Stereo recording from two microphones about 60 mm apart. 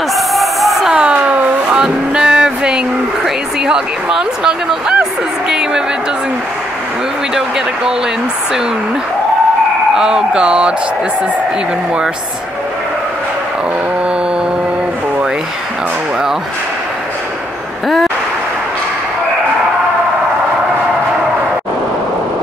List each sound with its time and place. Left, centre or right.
0.1 s a sound: centre
0.8 s vehicle: centre
3.6 s speech: centre
9.9 s speech: centre
17.8 s speech: centre